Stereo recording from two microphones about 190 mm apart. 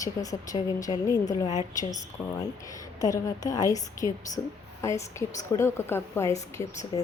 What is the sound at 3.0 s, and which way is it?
A woman's voice, 20° left (ahead or behind).